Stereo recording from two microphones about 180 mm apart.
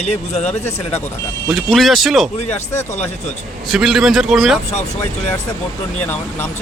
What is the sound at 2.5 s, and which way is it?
Speech, 15° left (ahead or behind).